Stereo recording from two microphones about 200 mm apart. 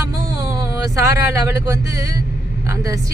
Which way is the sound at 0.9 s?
15° right (ahead or behind).